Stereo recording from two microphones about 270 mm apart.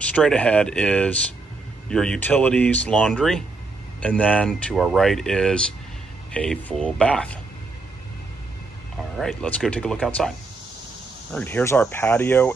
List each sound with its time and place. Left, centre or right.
0.0 s speech: centre
9.2 s speech: centre
11.3 s speech: centre